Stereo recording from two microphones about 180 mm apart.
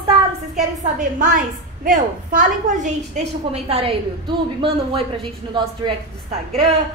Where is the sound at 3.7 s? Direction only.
30° right (ahead or behind).